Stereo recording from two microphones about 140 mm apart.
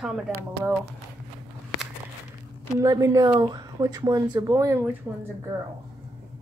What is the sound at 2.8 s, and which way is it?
A woman's voice, 25° right (ahead or behind).